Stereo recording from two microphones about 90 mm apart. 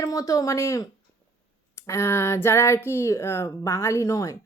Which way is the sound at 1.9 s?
30° left (ahead or behind).